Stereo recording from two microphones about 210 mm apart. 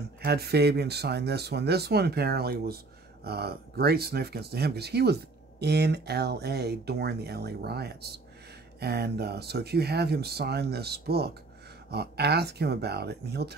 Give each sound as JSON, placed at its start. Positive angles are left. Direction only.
{"t": 0.2, "sound": "speech", "side_deg": -50}